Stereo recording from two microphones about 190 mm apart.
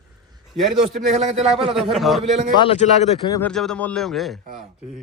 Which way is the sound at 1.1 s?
35° right (ahead or behind).